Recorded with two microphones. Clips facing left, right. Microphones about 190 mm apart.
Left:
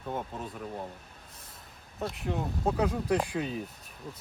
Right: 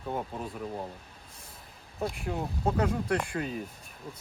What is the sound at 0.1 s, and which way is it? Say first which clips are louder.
Speech: right 1 dB; 10° right (ahead or behind).